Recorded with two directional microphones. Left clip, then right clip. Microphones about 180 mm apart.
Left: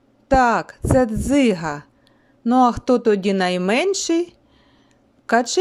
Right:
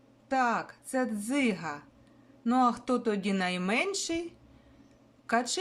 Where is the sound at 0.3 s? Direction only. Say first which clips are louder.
Left 12 dB; 40° left (ahead or behind).